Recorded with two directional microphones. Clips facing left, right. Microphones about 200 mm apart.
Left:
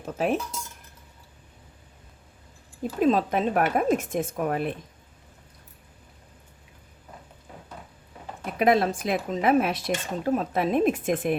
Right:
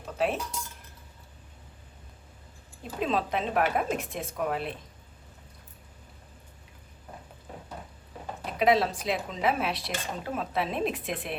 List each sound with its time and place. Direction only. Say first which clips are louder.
0.0 s speech: left 3 dB; 45° left (ahead or behind)
3.0 s speech: left 6 dB; 45° left (ahead or behind)
8.5 s speech: left 3 dB; 50° left (ahead or behind)